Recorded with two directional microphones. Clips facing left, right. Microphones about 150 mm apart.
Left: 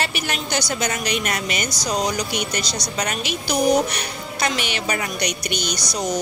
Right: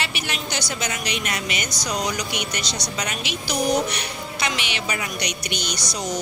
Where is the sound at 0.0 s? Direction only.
45° left (ahead or behind).